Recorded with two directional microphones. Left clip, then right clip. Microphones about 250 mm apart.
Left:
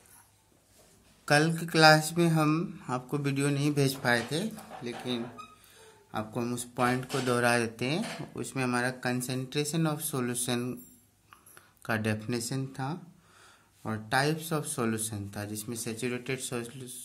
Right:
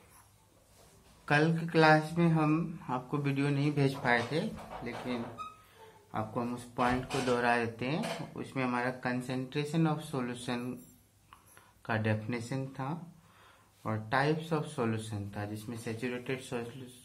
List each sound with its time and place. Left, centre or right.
1.2 s speech: left
6.1 s speech: left